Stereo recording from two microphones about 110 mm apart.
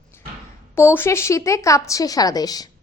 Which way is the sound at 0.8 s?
25° left (ahead or behind).